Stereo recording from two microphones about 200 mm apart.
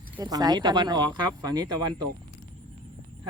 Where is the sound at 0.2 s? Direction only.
20° right (ahead or behind).